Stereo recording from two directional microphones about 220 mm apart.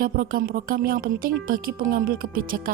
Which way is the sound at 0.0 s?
40° right (ahead or behind).